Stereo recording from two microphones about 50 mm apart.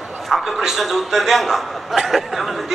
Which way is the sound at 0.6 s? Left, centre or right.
Centre.